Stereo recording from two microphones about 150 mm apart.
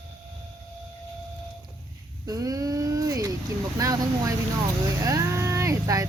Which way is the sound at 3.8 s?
20° right (ahead or behind).